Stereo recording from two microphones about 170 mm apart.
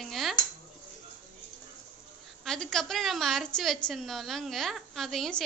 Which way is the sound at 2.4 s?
5° left (ahead or behind).